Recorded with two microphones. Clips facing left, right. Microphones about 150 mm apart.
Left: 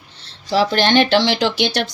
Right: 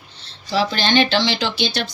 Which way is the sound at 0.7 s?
60° left (ahead or behind).